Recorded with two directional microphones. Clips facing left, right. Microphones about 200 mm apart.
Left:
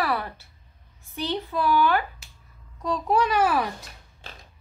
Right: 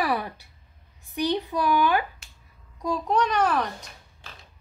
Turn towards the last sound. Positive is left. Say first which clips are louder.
# left 1 dB
turn(degrees=5)  # may be behind; listen again after turning